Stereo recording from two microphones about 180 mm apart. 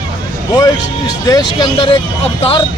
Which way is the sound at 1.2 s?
20° left (ahead or behind).